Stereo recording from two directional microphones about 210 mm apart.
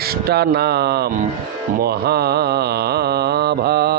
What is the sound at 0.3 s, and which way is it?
Mantra, 50° right (ahead or behind).